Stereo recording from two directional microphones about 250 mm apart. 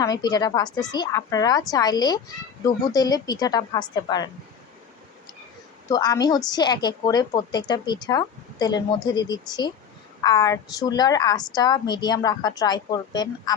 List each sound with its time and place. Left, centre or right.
0.0 s a woman's voice: centre
5.9 s a woman's voice: centre